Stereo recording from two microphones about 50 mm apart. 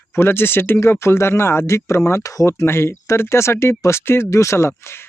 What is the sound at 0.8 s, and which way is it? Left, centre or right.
Speech, left.